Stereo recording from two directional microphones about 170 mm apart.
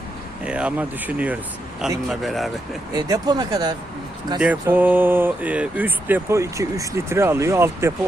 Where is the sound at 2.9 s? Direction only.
25° right (ahead or behind).